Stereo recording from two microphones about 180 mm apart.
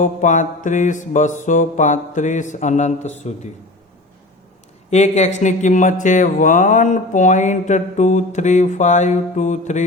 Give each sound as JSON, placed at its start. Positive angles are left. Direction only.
{"t": 0.0, "sound": "mantra", "side_deg": 45}
{"t": 4.9, "sound": "speech", "side_deg": 40}